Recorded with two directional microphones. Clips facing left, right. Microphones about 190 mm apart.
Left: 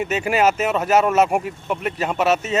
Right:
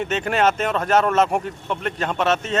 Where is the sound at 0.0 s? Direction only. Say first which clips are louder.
Left 1 dB; 5° left (ahead or behind).